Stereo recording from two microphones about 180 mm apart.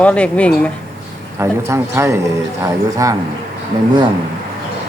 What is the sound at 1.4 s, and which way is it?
Speech, 15° right (ahead or behind).